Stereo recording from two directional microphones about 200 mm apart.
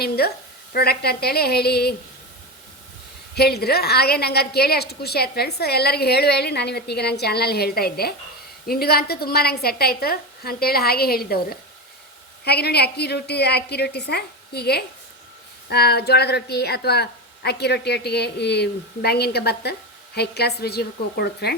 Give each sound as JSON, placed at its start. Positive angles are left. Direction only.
{"t": 0.2, "sound": "a woman's voice", "side_deg": 50}
{"t": 3.3, "sound": "a woman's voice", "side_deg": 55}